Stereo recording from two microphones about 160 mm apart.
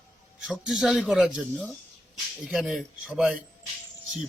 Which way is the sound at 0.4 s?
Centre (ahead or behind).